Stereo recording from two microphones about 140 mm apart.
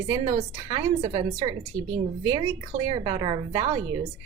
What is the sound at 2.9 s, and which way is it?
Speech, 30° right (ahead or behind).